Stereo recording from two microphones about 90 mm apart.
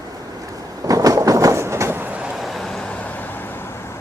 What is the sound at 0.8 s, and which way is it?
Train, 40° right (ahead or behind).